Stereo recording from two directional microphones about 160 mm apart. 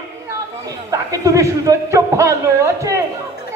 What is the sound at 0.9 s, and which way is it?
Speech, 20° right (ahead or behind).